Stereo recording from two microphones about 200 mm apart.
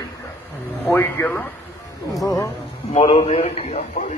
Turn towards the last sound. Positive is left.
turn(degrees=30)  # may be behind; listen again after turning